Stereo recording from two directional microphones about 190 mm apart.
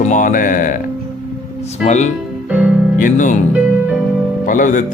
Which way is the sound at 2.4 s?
5° right (ahead or behind).